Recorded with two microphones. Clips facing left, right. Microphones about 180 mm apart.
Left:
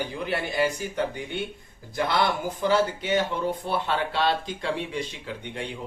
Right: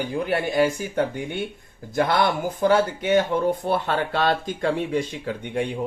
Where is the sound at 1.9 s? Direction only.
50° right (ahead or behind).